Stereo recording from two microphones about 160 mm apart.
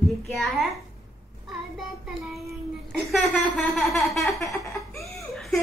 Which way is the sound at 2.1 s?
Centre (ahead or behind).